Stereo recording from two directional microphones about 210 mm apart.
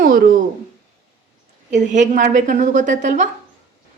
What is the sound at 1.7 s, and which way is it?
A woman's voice, 35° right (ahead or behind).